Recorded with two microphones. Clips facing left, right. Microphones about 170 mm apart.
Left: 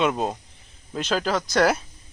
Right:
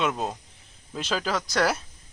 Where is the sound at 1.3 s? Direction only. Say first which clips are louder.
Left 4 dB; 30° left (ahead or behind).